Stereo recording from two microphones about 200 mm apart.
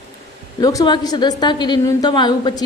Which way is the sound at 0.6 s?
20° left (ahead or behind).